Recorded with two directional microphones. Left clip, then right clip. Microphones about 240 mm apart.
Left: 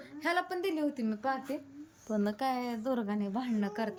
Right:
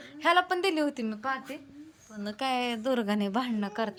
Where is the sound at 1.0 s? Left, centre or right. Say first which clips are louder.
Right 1 dB; centre.